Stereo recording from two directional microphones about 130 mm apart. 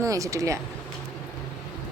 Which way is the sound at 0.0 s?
25° right (ahead or behind).